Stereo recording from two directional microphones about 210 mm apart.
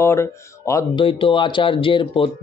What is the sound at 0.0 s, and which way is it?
Speech, 15° left (ahead or behind).